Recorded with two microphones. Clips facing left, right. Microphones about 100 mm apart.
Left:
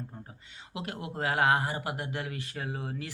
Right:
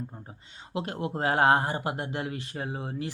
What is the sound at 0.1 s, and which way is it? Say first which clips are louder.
Speech: right 1 dB; 30° right (ahead or behind).